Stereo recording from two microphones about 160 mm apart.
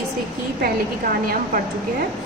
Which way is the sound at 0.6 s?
65° right (ahead or behind).